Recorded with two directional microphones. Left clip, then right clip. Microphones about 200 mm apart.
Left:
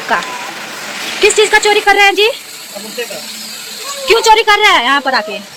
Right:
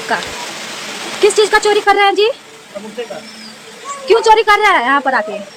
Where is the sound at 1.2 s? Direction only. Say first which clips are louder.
Left 2 dB; centre (ahead or behind).